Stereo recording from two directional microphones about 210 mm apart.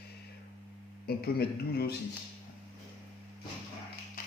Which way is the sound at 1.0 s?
50° left (ahead or behind).